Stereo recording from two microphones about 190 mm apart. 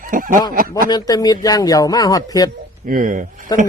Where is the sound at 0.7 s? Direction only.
20° left (ahead or behind).